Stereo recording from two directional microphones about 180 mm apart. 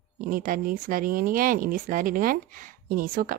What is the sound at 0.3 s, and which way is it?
A woman's voice, 50° right (ahead or behind).